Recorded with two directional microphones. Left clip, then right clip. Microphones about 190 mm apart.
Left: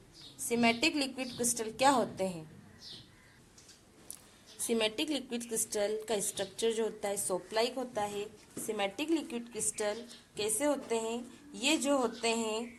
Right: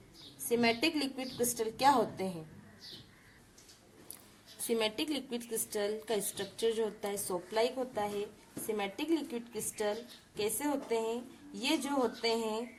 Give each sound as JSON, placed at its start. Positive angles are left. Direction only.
{"t": 0.4, "sound": "a woman's voice", "side_deg": 35}
{"t": 4.7, "sound": "a woman's voice", "side_deg": 35}